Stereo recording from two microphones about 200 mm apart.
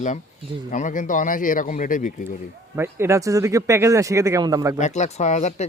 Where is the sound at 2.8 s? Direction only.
10° right (ahead or behind).